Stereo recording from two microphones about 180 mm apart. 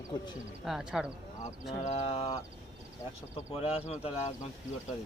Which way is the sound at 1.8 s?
40° left (ahead or behind).